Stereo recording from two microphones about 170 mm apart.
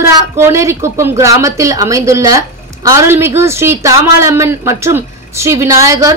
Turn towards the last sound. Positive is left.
turn(degrees=-20)  # may be behind; listen again after turning